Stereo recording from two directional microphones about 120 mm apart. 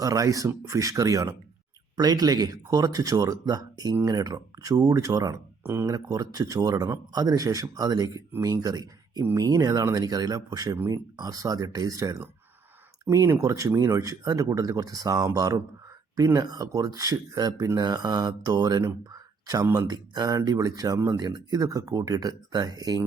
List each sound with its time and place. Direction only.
0.0 s speech: 30° right (ahead or behind)